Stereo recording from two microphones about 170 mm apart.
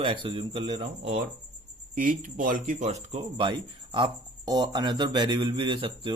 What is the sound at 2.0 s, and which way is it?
Speech, 50° right (ahead or behind).